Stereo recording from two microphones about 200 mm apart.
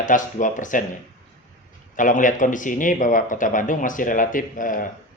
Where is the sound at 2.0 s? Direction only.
40° left (ahead or behind).